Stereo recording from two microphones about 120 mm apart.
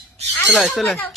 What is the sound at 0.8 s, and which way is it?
Speech, 10° left (ahead or behind).